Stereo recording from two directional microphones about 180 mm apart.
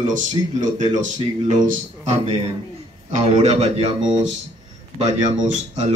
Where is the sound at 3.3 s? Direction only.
35° right (ahead or behind).